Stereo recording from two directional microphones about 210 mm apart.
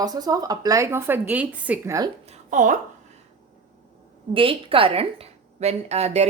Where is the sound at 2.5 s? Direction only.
35° right (ahead or behind).